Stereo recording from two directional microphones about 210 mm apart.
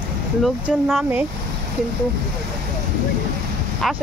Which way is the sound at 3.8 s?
Centre (ahead or behind).